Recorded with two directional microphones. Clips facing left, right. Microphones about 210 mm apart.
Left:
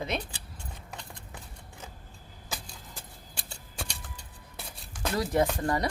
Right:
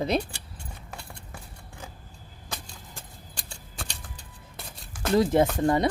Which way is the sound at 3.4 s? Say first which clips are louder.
Even; 5° left (ahead or behind).